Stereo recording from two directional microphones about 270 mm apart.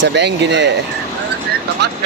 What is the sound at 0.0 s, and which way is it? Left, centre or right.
Speech, right.